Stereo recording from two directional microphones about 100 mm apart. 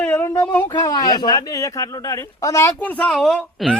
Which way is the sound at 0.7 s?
40° left (ahead or behind).